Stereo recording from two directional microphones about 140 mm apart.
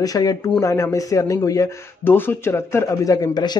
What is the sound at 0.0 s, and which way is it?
Speech, 25° left (ahead or behind).